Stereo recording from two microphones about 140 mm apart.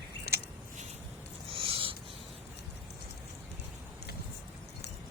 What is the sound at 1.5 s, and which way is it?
Owl, 40° right (ahead or behind).